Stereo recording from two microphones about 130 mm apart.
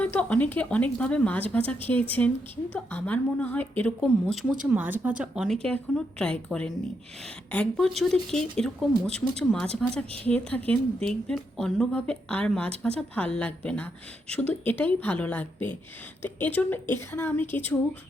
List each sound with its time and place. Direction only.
0.0 s speech: 10° left (ahead or behind)
4.6 s speech: 10° right (ahead or behind)
5.6 s speech: 10° left (ahead or behind)